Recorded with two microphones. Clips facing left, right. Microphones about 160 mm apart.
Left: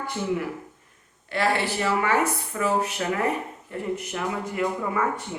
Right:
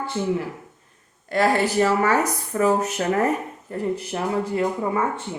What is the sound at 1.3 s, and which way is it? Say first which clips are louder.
A woman's voice: right 5 dB; 40° right (ahead or behind).